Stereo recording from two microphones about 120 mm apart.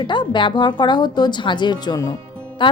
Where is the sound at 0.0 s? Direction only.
40° left (ahead or behind).